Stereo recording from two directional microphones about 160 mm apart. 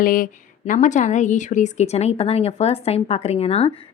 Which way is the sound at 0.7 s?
50° left (ahead or behind).